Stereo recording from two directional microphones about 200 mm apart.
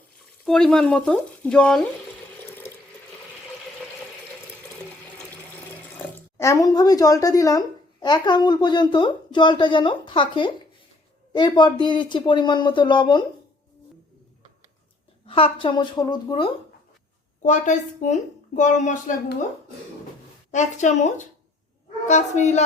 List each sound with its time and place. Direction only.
0.4 s speech: 5° left (ahead or behind)
6.3 s a woman's voice: 15° left (ahead or behind)
15.3 s speech: 25° left (ahead or behind)
17.4 s speech: 40° left (ahead or behind)
20.5 s speech: 35° left (ahead or behind)